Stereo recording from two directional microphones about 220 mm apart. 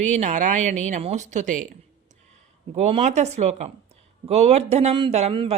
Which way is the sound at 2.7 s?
30° right (ahead or behind).